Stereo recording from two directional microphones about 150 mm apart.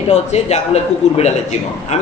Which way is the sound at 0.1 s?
45° left (ahead or behind).